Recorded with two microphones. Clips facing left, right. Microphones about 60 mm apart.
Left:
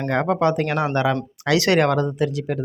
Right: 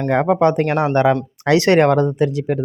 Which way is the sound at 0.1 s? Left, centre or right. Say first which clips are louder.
Right 5 dB; right.